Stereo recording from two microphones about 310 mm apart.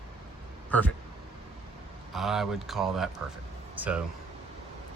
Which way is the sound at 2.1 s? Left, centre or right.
Centre.